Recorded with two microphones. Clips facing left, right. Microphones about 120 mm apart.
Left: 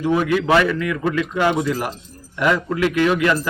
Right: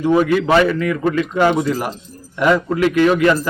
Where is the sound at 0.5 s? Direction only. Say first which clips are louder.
Right 2 dB; 30° right (ahead or behind).